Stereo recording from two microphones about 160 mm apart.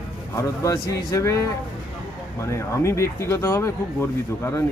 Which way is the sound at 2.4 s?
20° left (ahead or behind).